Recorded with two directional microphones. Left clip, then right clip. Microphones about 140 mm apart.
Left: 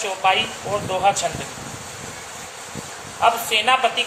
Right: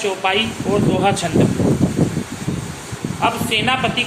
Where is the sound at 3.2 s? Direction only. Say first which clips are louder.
Even; 20° left (ahead or behind).